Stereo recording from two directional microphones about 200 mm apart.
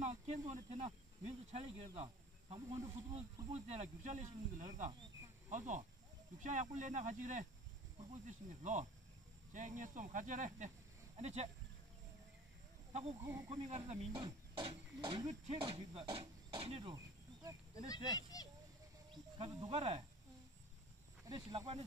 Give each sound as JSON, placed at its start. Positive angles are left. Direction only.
{"t": 0.0, "sound": "speech", "side_deg": -35}
{"t": 13.2, "sound": "speech", "side_deg": -15}
{"t": 13.7, "sound": "speech", "side_deg": -35}
{"t": 16.9, "sound": "a sound", "side_deg": -15}
{"t": 17.8, "sound": "speech", "side_deg": 20}
{"t": 19.3, "sound": "speech", "side_deg": -25}
{"t": 21.3, "sound": "speech", "side_deg": -20}